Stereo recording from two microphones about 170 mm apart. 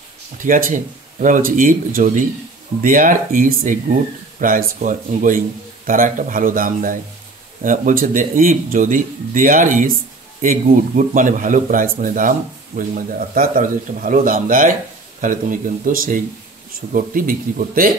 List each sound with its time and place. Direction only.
0.4 s a man's voice: 55° right (ahead or behind)